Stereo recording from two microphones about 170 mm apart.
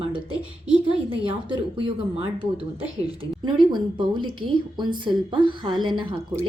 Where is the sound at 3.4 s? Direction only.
25° right (ahead or behind).